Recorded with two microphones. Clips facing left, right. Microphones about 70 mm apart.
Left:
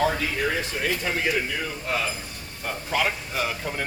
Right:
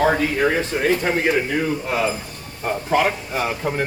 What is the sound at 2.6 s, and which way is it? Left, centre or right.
Speech, right.